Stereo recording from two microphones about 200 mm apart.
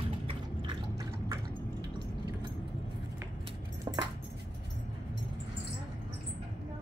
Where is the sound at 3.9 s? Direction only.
20° right (ahead or behind).